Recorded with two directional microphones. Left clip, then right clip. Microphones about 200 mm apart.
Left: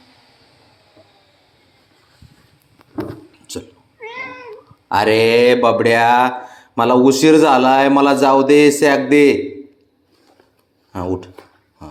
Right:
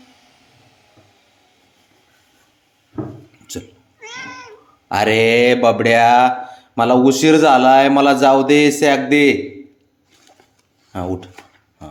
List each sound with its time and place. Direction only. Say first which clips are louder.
3.5 s cat: left 1 dB; 20° right (ahead or behind)
4.9 s speech: left 1 dB; 25° right (ahead or behind)
10.9 s speech: left 2 dB; 15° right (ahead or behind)